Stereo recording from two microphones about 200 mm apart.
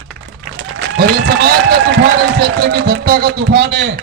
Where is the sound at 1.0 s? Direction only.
50° right (ahead or behind).